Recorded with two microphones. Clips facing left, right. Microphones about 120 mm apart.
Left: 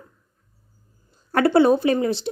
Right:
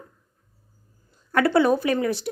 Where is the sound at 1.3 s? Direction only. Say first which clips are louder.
Left 3 dB; 30° left (ahead or behind).